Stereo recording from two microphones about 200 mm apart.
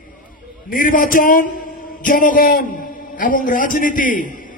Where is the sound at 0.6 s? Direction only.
45° left (ahead or behind).